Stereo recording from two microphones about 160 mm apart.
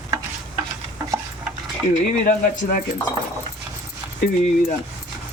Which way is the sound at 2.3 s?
55° left (ahead or behind).